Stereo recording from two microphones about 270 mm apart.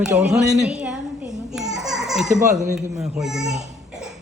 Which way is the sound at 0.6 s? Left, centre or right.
Centre.